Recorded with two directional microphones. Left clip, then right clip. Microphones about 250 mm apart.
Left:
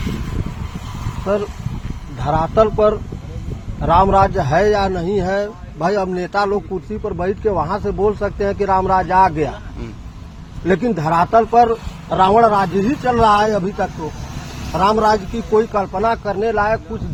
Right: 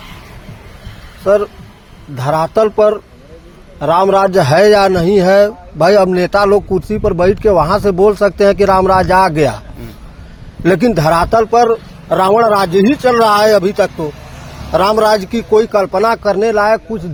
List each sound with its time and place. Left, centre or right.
2.1 s a man's voice: right
10.6 s a man's voice: right